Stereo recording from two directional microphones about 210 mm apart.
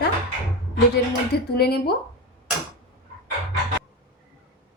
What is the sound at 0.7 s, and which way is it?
Speech, 50° left (ahead or behind).